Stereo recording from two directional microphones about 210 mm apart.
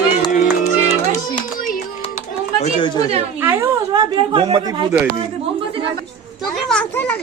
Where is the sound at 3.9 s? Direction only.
20° right (ahead or behind).